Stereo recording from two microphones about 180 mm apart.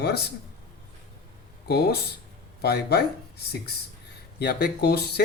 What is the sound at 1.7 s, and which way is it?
Speech, 65° left (ahead or behind).